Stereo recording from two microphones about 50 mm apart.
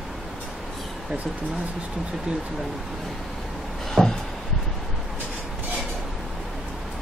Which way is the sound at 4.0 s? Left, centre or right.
Centre.